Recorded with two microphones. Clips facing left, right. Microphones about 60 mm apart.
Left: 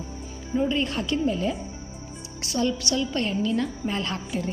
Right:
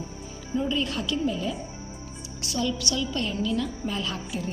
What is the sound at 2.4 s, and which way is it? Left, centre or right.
A woman's voice, left.